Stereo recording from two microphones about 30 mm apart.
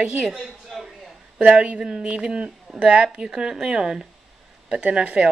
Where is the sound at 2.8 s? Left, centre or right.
Right.